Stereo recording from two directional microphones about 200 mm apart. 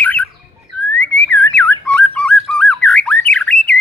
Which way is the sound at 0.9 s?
65° left (ahead or behind).